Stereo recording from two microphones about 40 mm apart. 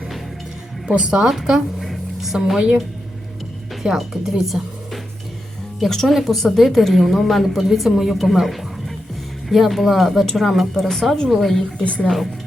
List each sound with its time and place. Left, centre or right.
0.9 s speech: right
1.3 s a woman's voice: centre
1.8 s a sound: centre
3.8 s speech: centre
5.8 s a woman's voice: centre
11.8 s speech: left